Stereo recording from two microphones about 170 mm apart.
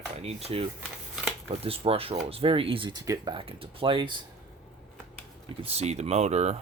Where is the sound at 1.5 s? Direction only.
35° right (ahead or behind).